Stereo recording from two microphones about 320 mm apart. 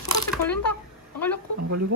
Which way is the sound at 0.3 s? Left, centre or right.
Centre.